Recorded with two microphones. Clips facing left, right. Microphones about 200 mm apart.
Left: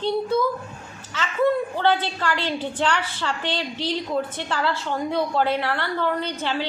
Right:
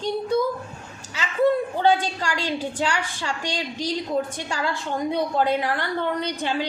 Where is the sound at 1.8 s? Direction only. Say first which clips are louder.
Right 1 dB; 10° right (ahead or behind).